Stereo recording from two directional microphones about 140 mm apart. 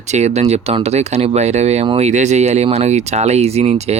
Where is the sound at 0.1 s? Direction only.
55° right (ahead or behind).